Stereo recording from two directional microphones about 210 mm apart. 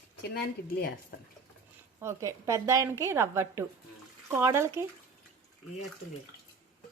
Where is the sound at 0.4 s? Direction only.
45° left (ahead or behind).